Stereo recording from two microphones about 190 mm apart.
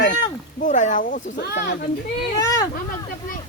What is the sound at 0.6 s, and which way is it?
Speech, 40° left (ahead or behind).